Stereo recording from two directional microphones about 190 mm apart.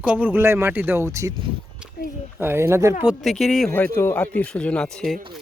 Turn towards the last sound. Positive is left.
turn(degrees=0)  # may be behind; listen again after turning